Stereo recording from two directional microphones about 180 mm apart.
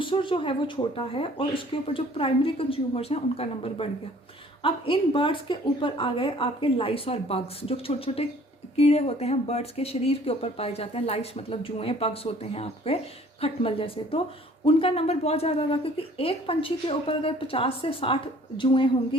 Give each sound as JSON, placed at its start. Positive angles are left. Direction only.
{"t": 0.0, "sound": "speech", "side_deg": 25}